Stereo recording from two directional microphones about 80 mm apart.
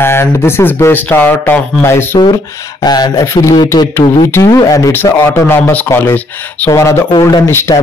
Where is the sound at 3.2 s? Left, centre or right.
Left.